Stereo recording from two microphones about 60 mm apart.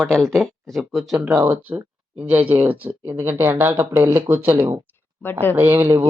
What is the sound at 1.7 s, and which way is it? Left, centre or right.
Speech, right.